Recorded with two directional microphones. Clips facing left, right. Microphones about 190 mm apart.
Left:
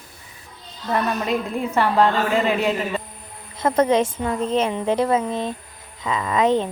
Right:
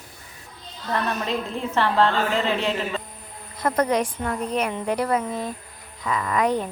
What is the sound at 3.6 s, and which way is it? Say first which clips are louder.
A woman's voice: left 4 dB; 25° left (ahead or behind).